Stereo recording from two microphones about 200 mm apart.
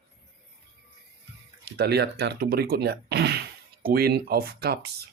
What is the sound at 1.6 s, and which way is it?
Speech, 55° right (ahead or behind).